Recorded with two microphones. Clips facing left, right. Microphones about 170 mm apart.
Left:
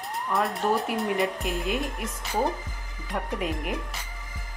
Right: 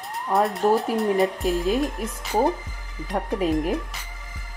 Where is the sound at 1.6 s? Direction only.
40° right (ahead or behind).